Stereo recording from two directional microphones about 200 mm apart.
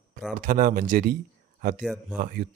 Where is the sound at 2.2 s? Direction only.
45° right (ahead or behind).